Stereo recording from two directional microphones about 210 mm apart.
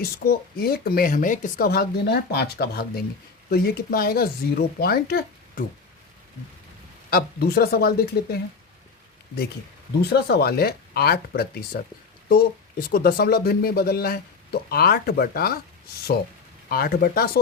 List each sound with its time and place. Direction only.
0.0 s speech: 45° left (ahead or behind)
7.1 s speech: 45° left (ahead or behind)
10.0 s speech: 50° left (ahead or behind)
12.9 s speech: 45° left (ahead or behind)
16.6 s speech: 45° left (ahead or behind)